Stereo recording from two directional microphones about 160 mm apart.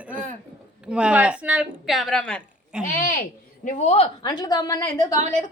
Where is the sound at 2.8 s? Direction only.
65° left (ahead or behind).